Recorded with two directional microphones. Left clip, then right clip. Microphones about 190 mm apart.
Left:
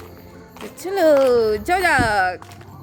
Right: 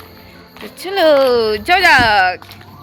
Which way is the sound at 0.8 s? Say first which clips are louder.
Right 4 dB; 5° left (ahead or behind).